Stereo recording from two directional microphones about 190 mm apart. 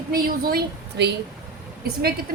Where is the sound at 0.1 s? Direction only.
50° right (ahead or behind).